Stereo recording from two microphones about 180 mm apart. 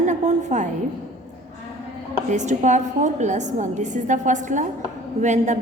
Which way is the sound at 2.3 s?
40° right (ahead or behind).